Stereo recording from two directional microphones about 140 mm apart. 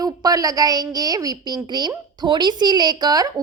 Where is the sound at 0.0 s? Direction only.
25° right (ahead or behind).